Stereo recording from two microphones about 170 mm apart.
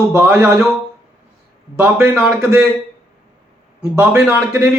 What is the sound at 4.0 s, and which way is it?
Speech, 10° right (ahead or behind).